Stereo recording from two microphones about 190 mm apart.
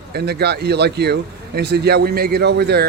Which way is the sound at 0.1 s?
55° right (ahead or behind).